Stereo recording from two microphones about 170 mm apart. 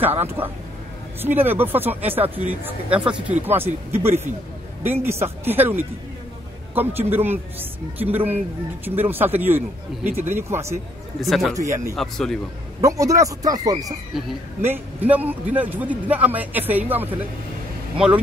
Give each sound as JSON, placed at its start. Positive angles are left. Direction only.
{"t": 0.2, "sound": "a man's voice", "side_deg": -10}
{"t": 11.1, "sound": "speech", "side_deg": 0}
{"t": 11.5, "sound": "a man's voice", "side_deg": -15}
{"t": 11.9, "sound": "speech", "side_deg": 0}
{"t": 12.8, "sound": "speech", "side_deg": -20}
{"t": 14.1, "sound": "a man's voice", "side_deg": 0}